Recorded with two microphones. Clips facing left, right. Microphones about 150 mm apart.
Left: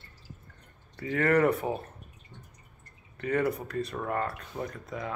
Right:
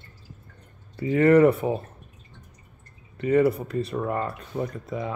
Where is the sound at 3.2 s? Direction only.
10° right (ahead or behind).